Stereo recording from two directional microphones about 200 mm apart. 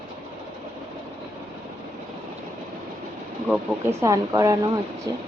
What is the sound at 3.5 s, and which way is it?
Speech, 15° right (ahead or behind).